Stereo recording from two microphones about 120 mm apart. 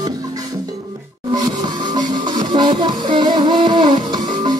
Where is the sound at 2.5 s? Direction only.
45° right (ahead or behind).